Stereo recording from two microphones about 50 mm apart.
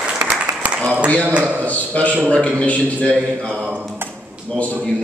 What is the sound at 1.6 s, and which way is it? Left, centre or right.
A man's voice, left.